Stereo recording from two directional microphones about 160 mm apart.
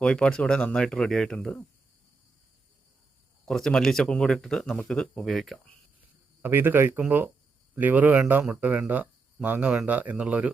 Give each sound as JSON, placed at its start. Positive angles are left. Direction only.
{"t": 0.0, "sound": "speech", "side_deg": 5}
{"t": 3.4, "sound": "speech", "side_deg": 5}
{"t": 6.4, "sound": "speech", "side_deg": -15}